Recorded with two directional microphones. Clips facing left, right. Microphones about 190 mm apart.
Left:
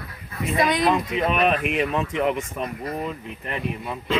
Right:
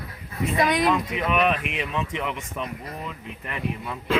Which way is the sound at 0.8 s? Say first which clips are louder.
Left 2 dB; 30° left (ahead or behind).